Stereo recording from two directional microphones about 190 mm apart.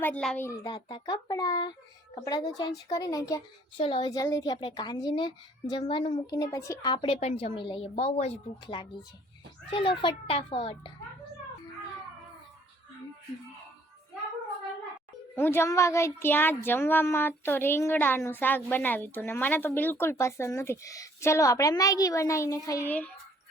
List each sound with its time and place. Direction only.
0.0 s a woman's voice: 5° left (ahead or behind); by 10.9 s 30° left (ahead or behind)
15.4 s speech: 10° left (ahead or behind)